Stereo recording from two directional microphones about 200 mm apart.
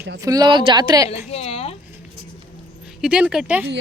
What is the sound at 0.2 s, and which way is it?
Speech, 20° right (ahead or behind).